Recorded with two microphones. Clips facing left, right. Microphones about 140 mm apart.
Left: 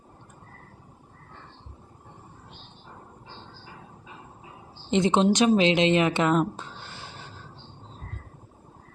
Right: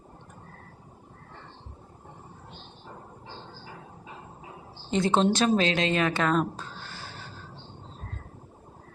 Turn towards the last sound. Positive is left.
turn(degrees=20)  # may be behind; listen again after turning